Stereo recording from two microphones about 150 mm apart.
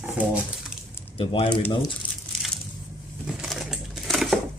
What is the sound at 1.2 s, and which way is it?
Speech, 35° left (ahead or behind).